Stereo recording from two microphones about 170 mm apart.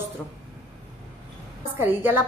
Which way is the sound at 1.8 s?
10° right (ahead or behind).